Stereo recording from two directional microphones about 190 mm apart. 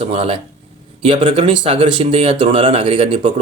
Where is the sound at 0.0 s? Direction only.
30° right (ahead or behind).